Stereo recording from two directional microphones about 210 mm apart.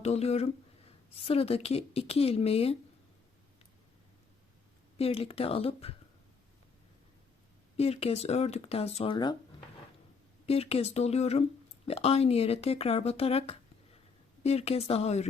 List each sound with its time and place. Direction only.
0.0 s speech: 30° left (ahead or behind)
4.9 s speech: 25° left (ahead or behind)
7.8 s speech: 30° left (ahead or behind)